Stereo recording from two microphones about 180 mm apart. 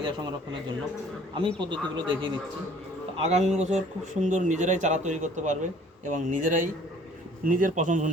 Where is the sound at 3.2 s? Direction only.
40° right (ahead or behind).